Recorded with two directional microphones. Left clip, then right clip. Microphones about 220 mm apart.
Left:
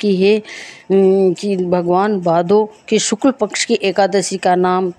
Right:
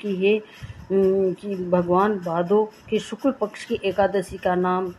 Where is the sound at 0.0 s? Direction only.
50° left (ahead or behind).